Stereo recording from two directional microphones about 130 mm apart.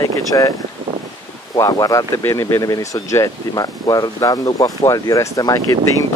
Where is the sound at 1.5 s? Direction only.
25° left (ahead or behind).